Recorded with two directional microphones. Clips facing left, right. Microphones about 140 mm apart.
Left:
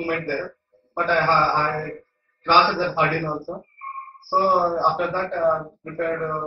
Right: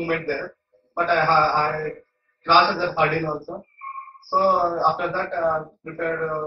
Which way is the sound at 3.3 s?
Centre (ahead or behind).